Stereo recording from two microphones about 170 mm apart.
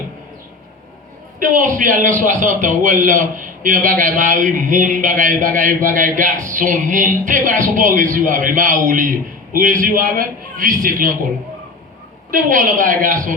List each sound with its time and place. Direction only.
1.4 s a man's voice: 50° right (ahead or behind)
12.3 s a man's voice: 50° right (ahead or behind)